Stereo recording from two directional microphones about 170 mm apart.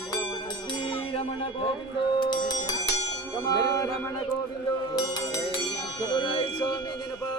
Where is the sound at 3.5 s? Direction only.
20° left (ahead or behind).